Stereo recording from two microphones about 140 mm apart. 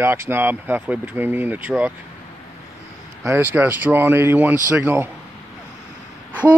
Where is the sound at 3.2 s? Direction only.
15° right (ahead or behind).